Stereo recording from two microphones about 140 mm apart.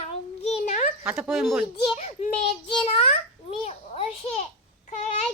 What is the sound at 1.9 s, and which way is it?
Speech, 50° left (ahead or behind).